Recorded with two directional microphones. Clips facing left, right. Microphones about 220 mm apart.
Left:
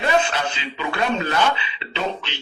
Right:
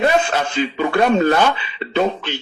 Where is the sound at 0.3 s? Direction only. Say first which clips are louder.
Right 8 dB; 45° right (ahead or behind).